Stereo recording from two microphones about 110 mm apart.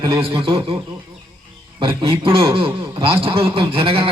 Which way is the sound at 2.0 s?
50° right (ahead or behind).